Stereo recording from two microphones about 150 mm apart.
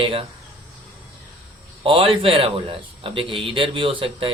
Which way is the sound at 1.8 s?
35° right (ahead or behind).